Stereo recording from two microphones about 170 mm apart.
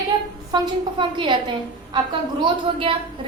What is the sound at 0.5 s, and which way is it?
Speech, 25° right (ahead or behind).